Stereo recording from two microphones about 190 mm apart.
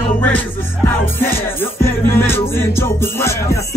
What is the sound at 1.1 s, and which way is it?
Music, 10° left (ahead or behind).